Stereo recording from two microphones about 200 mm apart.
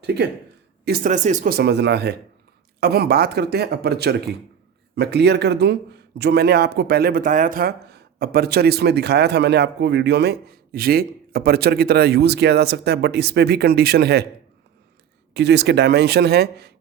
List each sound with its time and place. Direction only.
0.0 s speech: 55° right (ahead or behind)
0.9 s speech: 45° right (ahead or behind)
15.3 s speech: 55° right (ahead or behind)